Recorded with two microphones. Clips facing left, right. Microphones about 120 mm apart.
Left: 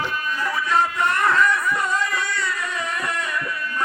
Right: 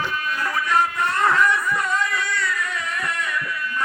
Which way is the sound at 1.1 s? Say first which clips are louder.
Right 1 dB; 20° right (ahead or behind).